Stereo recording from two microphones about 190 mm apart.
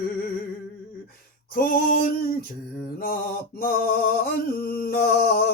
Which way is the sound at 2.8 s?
50° left (ahead or behind).